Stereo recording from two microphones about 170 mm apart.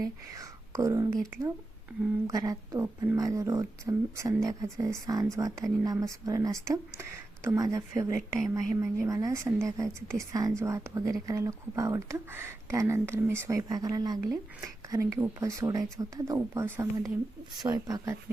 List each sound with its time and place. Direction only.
0.0 s speech: 20° right (ahead or behind)
2.2 s a woman's voice: 20° right (ahead or behind)